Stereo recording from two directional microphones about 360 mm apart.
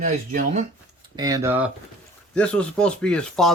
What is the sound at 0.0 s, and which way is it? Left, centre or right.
Speech, centre.